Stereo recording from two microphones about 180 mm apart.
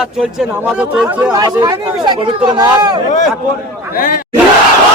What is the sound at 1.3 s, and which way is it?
Speech, 20° right (ahead or behind).